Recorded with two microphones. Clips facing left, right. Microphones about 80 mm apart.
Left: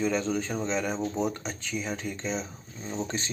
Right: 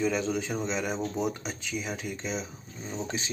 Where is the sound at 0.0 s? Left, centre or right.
Centre.